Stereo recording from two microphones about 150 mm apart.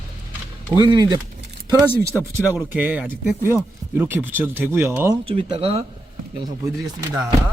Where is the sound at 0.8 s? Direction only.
25° right (ahead or behind).